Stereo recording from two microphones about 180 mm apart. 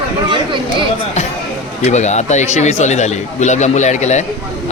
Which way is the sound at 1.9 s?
40° left (ahead or behind).